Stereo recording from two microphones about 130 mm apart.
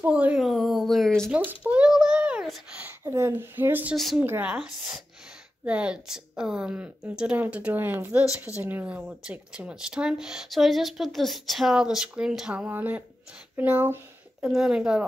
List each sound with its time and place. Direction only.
0.0 s a sound: 10° right (ahead or behind)
1.3 s a sound: 10° right (ahead or behind)
2.8 s a woman's voice: 20° right (ahead or behind)
3.9 s speech: centre (ahead or behind)
4.2 s a woman's voice: 15° right (ahead or behind)
4.6 s a woman's voice: centre (ahead or behind)